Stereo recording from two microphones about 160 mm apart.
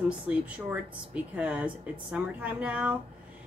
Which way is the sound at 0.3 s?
10° right (ahead or behind).